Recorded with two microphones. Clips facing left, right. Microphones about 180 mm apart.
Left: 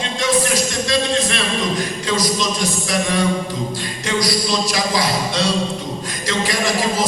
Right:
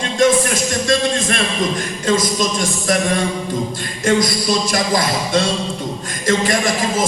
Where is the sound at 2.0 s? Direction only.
50° right (ahead or behind).